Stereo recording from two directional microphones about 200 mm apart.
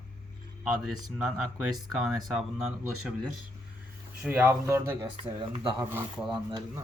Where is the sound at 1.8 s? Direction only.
20° right (ahead or behind).